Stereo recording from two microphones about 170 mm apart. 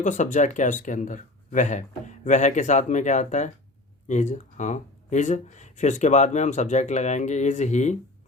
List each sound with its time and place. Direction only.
0.0 s speech: 50° left (ahead or behind)